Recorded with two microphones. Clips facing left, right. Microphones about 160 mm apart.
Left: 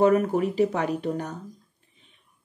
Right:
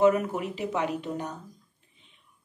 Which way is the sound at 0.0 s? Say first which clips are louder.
Left 3 dB; 40° left (ahead or behind).